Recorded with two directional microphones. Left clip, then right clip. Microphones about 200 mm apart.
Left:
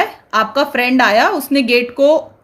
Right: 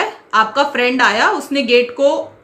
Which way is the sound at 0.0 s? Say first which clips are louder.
Right 1 dB; 45° left (ahead or behind).